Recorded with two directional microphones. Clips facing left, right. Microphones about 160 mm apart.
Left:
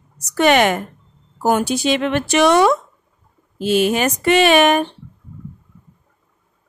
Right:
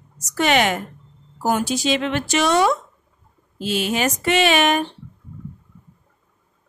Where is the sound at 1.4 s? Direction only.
60° left (ahead or behind).